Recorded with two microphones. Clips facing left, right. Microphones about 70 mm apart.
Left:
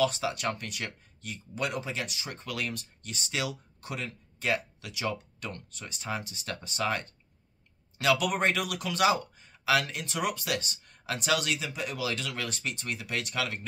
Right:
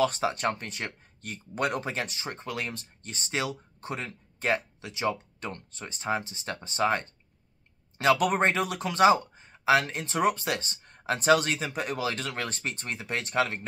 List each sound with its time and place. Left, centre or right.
0.0 s speech: right